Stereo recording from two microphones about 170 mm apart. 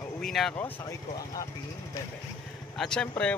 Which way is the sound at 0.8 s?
20° left (ahead or behind).